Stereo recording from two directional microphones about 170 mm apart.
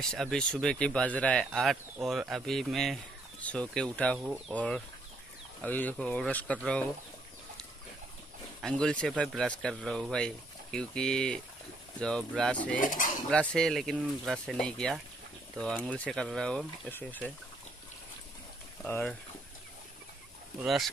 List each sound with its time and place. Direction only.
0.0 s speech: 5° left (ahead or behind)
8.5 s speech: 5° left (ahead or behind)
12.8 s cutlery: 50° left (ahead or behind)
13.3 s speech: 5° left (ahead or behind)
18.9 s speech: 10° left (ahead or behind)
20.6 s speech: centre (ahead or behind)